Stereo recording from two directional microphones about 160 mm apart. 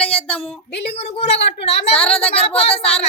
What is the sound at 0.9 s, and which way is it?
Speech, 40° left (ahead or behind).